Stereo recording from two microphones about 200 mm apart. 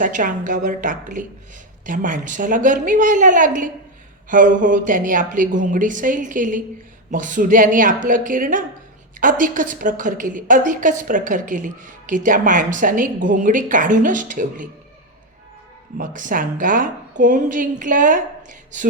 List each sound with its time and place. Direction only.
0.0 s a woman's voice: 40° right (ahead or behind)
16.0 s a woman's voice: 40° right (ahead or behind)